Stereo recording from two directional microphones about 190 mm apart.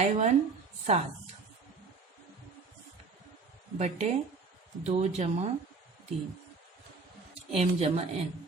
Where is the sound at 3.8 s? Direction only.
35° right (ahead or behind).